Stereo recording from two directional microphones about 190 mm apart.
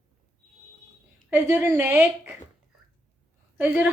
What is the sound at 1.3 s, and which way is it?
A woman's voice, 10° right (ahead or behind).